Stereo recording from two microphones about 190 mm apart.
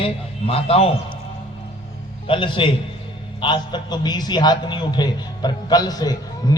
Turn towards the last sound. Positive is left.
turn(degrees=20)  # may be behind; listen again after turning